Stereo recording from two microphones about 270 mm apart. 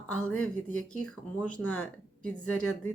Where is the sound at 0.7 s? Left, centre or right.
Left.